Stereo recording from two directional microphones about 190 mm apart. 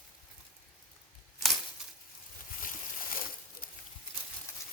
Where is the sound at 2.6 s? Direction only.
45° left (ahead or behind).